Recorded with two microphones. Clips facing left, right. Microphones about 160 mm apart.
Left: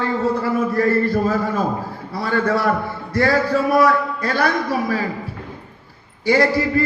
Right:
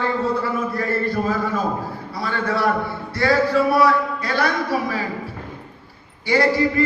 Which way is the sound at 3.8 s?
40° left (ahead or behind).